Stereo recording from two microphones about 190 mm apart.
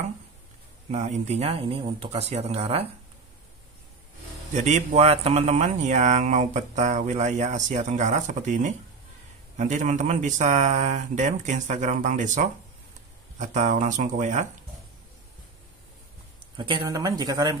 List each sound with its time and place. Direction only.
0.9 s speech: 35° right (ahead or behind)
4.6 s speech: 40° right (ahead or behind)
16.5 s speech: 25° right (ahead or behind)